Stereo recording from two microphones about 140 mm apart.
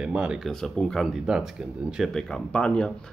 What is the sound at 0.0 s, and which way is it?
Speech, 5° right (ahead or behind).